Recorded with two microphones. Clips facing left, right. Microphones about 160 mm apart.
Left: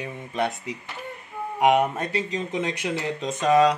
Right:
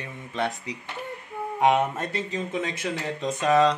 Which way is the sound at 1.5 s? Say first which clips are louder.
Left 2 dB; 20° left (ahead or behind).